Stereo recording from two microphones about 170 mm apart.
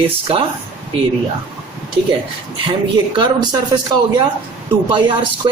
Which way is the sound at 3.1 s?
25° right (ahead or behind).